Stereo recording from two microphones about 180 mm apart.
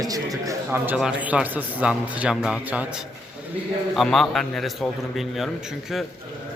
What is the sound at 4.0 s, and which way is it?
A man's voice, centre (ahead or behind).